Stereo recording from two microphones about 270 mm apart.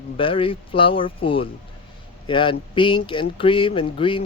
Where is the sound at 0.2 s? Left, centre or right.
Centre.